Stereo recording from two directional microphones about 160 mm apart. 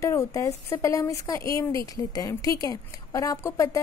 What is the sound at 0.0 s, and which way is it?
A woman's voice, 20° left (ahead or behind).